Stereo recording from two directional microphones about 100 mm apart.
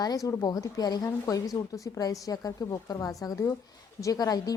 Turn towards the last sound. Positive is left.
turn(degrees=40)  # may be behind; listen again after turning